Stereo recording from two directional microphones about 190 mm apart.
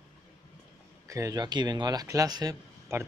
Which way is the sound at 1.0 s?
15° right (ahead or behind).